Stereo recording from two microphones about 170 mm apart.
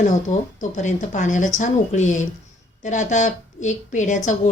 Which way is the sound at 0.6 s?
45° left (ahead or behind).